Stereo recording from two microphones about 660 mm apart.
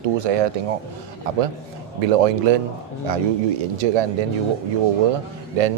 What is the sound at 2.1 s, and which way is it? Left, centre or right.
Speech, right.